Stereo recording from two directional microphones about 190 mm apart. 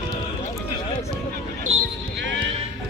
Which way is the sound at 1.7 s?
35° right (ahead or behind).